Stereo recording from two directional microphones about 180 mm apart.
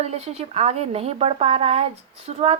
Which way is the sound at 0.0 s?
35° right (ahead or behind).